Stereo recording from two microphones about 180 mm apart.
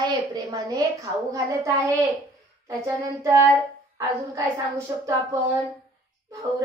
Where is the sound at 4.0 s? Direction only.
15° right (ahead or behind).